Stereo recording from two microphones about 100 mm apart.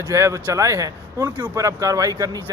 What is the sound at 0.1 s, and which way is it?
A man's voice, 30° right (ahead or behind).